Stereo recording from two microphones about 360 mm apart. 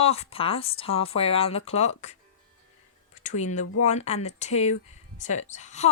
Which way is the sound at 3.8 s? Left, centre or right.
Centre.